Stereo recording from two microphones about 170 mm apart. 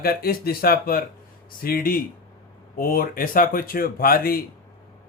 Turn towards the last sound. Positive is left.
turn(degrees=60)  # may be behind; listen again after turning